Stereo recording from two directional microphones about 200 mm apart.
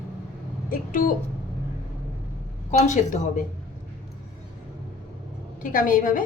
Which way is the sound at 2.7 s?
40° left (ahead or behind).